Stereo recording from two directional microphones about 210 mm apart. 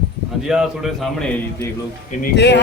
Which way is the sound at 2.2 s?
55° left (ahead or behind).